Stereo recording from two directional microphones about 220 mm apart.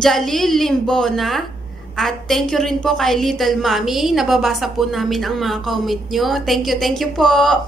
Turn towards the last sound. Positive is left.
turn(degrees=0)  # may be behind; listen again after turning